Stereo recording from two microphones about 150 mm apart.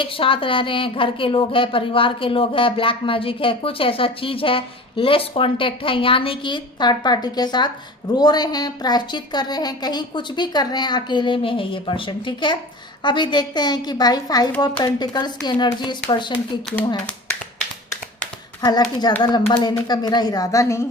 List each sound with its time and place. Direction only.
0.0 s a woman's voice: 35° left (ahead or behind)
18.6 s speech: 25° left (ahead or behind)